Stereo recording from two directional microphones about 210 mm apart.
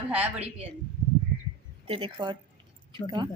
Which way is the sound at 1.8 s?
25° right (ahead or behind).